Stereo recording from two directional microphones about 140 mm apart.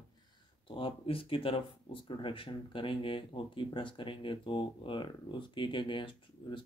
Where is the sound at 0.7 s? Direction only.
40° left (ahead or behind).